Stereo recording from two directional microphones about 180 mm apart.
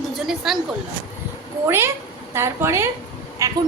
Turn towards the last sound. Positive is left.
turn(degrees=-20)  # may be behind; listen again after turning